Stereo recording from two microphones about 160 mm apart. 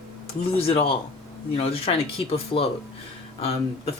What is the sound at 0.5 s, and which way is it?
Speech, 35° left (ahead or behind).